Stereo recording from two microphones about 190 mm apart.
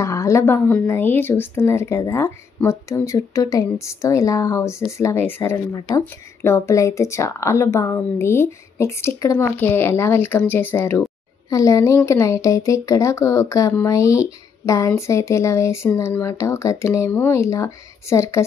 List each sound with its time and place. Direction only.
0.0 s speech: 15° left (ahead or behind)